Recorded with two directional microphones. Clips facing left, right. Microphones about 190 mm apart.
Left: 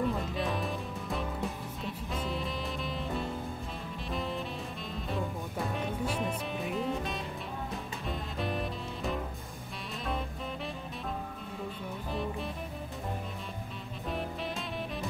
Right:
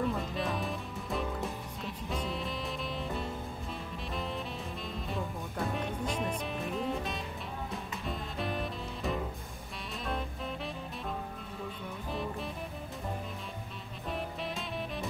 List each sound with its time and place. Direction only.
0.0 s music: centre (ahead or behind)
10.0 s saxophone: centre (ahead or behind)
12.1 s music: centre (ahead or behind)